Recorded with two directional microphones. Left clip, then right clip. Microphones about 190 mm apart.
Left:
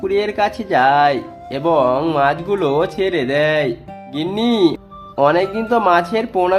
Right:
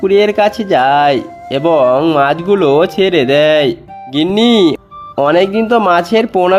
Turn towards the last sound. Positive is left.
turn(degrees=-35)  # may be behind; listen again after turning